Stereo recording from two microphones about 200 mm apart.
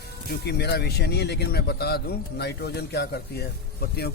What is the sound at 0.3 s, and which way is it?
Speech, 55° left (ahead or behind).